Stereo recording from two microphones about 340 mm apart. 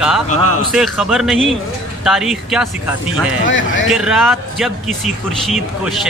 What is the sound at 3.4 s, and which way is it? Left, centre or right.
Speech, left.